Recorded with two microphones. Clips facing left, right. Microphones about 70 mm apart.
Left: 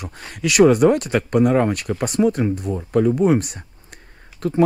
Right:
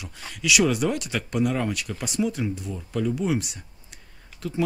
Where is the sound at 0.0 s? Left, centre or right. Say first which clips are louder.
Left 5 dB; left.